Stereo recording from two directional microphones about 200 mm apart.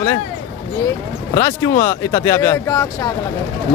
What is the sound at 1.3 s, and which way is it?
Speech, 20° left (ahead or behind).